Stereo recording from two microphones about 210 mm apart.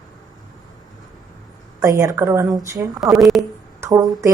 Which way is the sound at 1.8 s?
15° right (ahead or behind).